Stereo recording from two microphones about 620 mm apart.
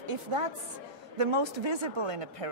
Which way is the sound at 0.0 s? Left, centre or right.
Right.